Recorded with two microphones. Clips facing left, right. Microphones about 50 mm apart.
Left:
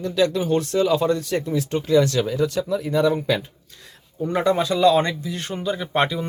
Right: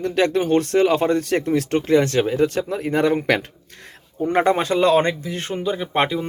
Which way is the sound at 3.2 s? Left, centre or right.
Right.